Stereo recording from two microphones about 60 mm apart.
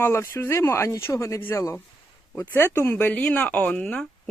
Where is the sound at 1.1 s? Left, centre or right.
Left.